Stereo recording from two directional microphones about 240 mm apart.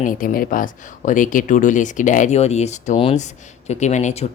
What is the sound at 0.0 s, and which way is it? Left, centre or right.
Speech, left.